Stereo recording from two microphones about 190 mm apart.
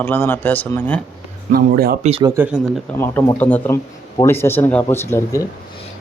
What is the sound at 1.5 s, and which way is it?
Speech, 50° right (ahead or behind).